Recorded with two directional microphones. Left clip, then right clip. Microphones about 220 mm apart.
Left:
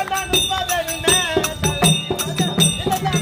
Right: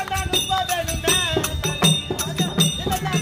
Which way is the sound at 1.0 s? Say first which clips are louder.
Left 3 dB; 5° left (ahead or behind).